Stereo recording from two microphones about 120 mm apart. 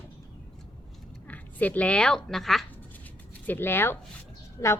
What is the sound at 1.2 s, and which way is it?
Speech, 10° left (ahead or behind).